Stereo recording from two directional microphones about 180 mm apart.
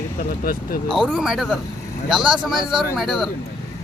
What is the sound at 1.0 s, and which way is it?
Speech, centre (ahead or behind).